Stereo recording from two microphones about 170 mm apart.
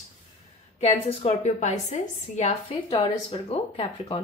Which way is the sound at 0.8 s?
35° left (ahead or behind).